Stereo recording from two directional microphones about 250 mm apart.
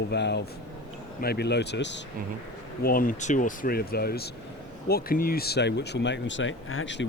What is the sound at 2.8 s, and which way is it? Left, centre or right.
Speech, left.